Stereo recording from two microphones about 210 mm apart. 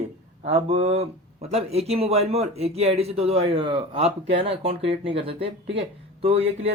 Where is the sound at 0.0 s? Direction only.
30° right (ahead or behind).